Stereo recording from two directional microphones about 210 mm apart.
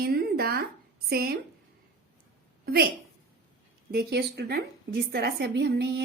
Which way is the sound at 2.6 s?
45° right (ahead or behind).